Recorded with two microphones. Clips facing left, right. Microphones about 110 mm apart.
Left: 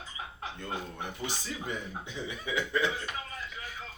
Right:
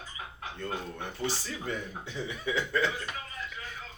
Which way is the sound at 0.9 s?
15° left (ahead or behind).